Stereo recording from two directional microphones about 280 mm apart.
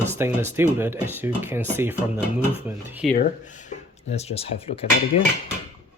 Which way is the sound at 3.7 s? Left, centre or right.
Left.